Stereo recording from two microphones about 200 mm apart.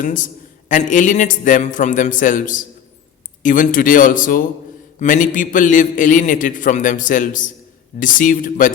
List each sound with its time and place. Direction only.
0.0 s a man's voice: 40° left (ahead or behind)